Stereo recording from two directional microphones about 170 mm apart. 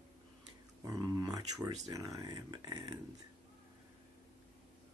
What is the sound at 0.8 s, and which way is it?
Speech, 20° right (ahead or behind).